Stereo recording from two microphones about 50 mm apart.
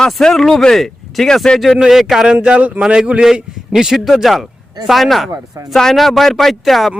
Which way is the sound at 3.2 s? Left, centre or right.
Centre.